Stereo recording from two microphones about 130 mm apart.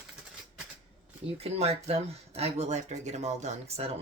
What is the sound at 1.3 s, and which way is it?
Speech, 50° right (ahead or behind).